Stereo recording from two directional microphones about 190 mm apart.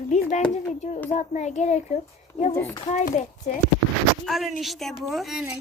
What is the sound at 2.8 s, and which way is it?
Speech, 40° left (ahead or behind).